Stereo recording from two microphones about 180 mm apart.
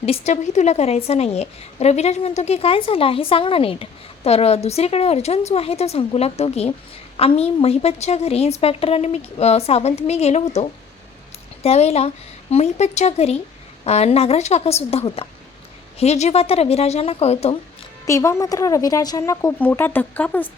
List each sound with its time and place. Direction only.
0.0 s a woman's voice: 35° left (ahead or behind)
18.0 s a woman's voice: 15° left (ahead or behind)